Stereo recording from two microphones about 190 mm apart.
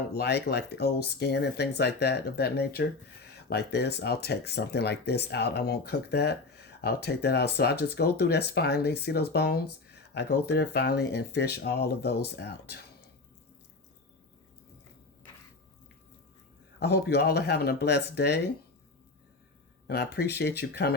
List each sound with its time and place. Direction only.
0.1 s speech: 60° left (ahead or behind)
16.8 s speech: 60° left (ahead or behind)
19.9 s speech: 55° left (ahead or behind)